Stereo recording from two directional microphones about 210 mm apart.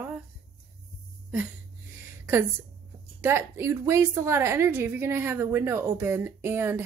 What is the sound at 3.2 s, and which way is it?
A woman's voice, 10° right (ahead or behind).